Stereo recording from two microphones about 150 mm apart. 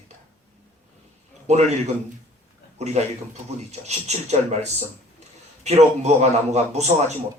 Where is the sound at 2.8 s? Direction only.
50° right (ahead or behind).